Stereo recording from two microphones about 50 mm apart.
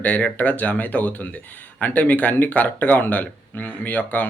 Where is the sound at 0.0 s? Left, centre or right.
Left.